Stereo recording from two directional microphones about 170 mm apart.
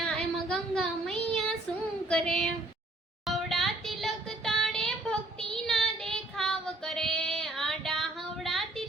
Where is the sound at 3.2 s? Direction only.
Centre (ahead or behind).